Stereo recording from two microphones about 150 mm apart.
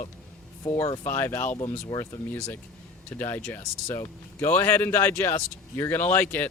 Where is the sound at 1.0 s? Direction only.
15° left (ahead or behind).